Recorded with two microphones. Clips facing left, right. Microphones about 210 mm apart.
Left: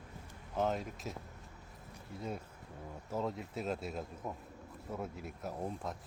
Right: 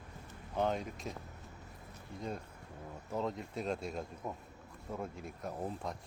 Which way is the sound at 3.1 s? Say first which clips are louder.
Even; 5° left (ahead or behind).